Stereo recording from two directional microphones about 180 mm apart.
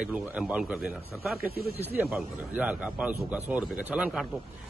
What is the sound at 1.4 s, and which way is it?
Speech, 60° right (ahead or behind).